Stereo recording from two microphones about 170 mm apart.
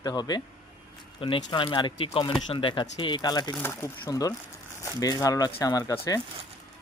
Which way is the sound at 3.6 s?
15° left (ahead or behind).